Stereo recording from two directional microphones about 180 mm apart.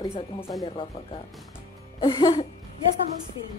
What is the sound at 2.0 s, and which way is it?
Speech, 30° left (ahead or behind).